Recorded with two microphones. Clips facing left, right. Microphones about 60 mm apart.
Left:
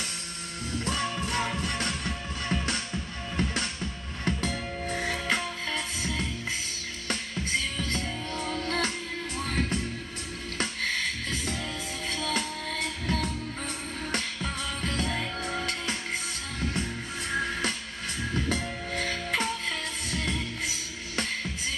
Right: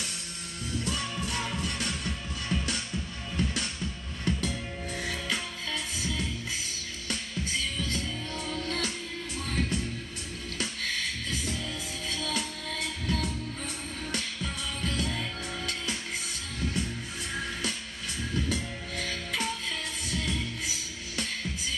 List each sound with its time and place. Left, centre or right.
0.7 s music: left
1.6 s music: left
2.5 s music: left
7.8 s music: left
12.1 s music: left
18.3 s music: left